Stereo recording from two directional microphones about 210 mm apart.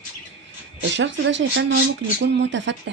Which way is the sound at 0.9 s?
60° right (ahead or behind).